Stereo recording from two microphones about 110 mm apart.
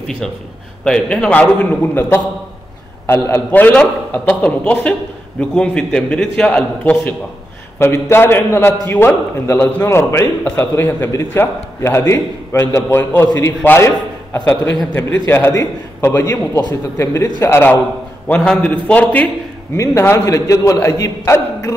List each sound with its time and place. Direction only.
0.2 s a man's voice: 5° left (ahead or behind); by 17.7 s 20° left (ahead or behind)
18.3 s a man's voice: 10° left (ahead or behind)
19.8 s a man's voice: 25° left (ahead or behind)